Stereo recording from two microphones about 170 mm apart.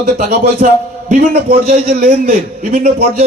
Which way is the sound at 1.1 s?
50° right (ahead or behind).